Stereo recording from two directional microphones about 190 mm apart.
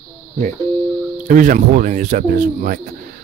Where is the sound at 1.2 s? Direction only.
45° right (ahead or behind).